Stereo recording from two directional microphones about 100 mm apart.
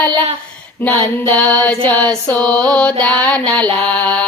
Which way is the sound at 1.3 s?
15° left (ahead or behind).